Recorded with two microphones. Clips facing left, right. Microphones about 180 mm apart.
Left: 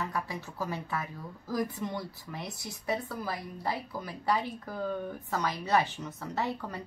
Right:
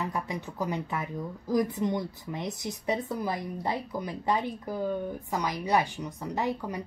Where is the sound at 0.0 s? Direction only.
20° right (ahead or behind).